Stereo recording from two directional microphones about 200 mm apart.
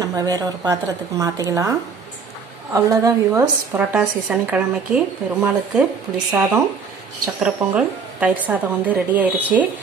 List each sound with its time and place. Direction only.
0.0 s a woman's voice: 20° right (ahead or behind)